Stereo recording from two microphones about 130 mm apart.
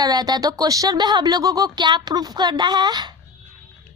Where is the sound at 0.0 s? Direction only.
30° right (ahead or behind).